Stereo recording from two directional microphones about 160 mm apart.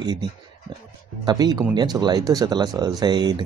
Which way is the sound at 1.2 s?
25° right (ahead or behind).